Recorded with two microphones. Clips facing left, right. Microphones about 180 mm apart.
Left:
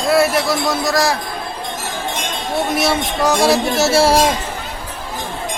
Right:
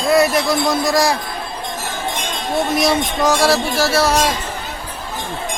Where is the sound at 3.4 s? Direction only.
20° left (ahead or behind).